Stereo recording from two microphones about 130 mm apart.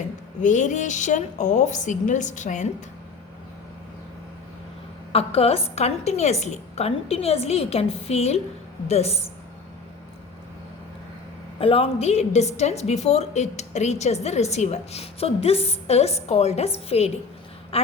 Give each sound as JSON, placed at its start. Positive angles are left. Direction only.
{"t": 0.4, "sound": "a woman's voice", "side_deg": 70}
{"t": 5.1, "sound": "a woman's voice", "side_deg": 50}
{"t": 11.6, "sound": "a woman's voice", "side_deg": 45}